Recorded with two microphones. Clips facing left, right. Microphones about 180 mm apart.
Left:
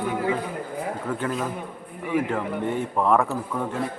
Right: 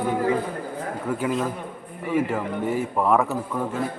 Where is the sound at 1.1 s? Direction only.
5° right (ahead or behind).